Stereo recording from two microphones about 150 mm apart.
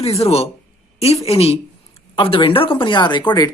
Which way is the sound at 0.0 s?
40° left (ahead or behind).